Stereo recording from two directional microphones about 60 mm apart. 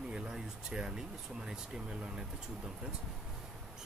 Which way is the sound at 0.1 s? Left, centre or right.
Centre.